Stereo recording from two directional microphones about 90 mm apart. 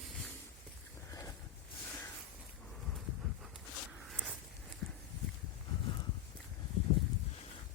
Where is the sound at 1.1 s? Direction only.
40° left (ahead or behind).